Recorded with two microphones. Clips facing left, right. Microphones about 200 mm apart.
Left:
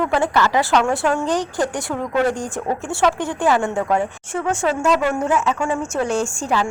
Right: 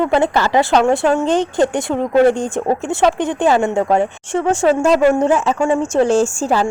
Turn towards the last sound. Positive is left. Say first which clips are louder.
# right 5 dB
turn(degrees=-35)  # may be behind; listen again after turning